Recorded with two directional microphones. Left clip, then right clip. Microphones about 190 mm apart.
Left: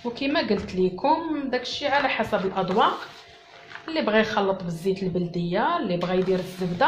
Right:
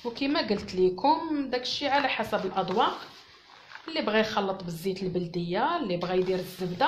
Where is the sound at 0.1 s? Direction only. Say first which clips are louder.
Left 4 dB; 35° right (ahead or behind).